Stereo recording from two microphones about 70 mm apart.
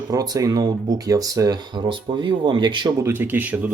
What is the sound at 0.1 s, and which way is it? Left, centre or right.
Speech, right.